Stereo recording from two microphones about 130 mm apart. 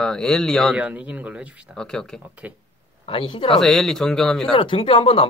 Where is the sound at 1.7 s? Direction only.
5° left (ahead or behind).